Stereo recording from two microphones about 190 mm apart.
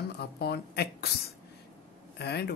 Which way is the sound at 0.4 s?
60° left (ahead or behind).